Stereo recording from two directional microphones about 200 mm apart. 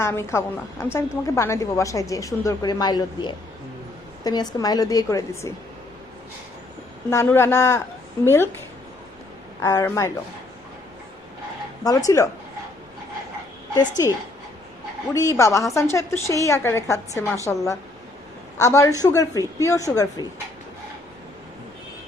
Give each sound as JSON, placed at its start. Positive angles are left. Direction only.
{"t": 0.0, "sound": "a woman's voice", "side_deg": 10}
{"t": 7.1, "sound": "a woman's voice", "side_deg": 15}
{"t": 9.6, "sound": "a woman's voice", "side_deg": 15}
{"t": 11.8, "sound": "a woman's voice", "side_deg": 20}
{"t": 13.7, "sound": "a woman's voice", "side_deg": 20}
{"t": 15.1, "sound": "a woman's voice", "side_deg": 15}